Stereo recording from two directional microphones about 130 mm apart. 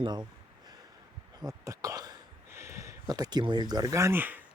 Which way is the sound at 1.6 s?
25° right (ahead or behind).